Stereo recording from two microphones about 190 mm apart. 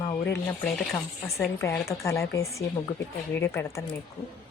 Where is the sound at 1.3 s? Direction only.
15° left (ahead or behind).